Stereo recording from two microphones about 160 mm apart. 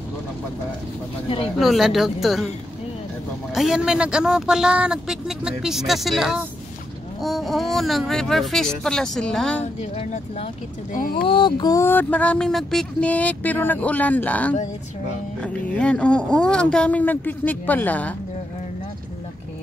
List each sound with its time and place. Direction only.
1.6 s speech: centre (ahead or behind)
3.5 s speech: 5° right (ahead or behind)
9.8 s speech: 40° left (ahead or behind)
10.9 s speech: 60° left (ahead or behind)
11.2 s speech: 30° left (ahead or behind); by 18.1 s 10° left (ahead or behind)